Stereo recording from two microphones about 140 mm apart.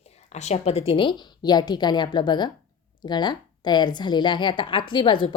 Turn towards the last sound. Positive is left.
turn(degrees=35)  # may be behind; listen again after turning